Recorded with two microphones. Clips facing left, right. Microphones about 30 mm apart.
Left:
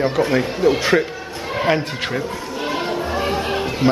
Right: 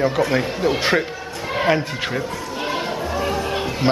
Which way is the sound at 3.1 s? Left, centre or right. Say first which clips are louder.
Left 1 dB; left.